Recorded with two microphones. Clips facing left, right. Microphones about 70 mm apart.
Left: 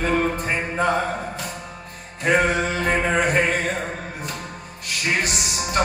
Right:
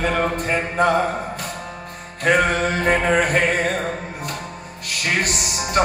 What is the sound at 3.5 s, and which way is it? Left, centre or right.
Music, right.